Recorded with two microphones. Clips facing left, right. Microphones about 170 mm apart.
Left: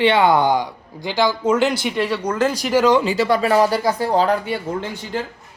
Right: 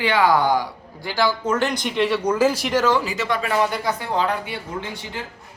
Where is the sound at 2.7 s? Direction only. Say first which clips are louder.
Left 4 dB; 15° left (ahead or behind).